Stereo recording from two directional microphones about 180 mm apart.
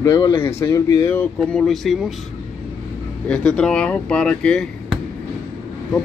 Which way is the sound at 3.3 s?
5° left (ahead or behind).